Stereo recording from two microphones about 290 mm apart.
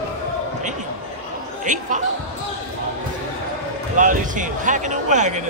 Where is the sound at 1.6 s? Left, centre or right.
Right.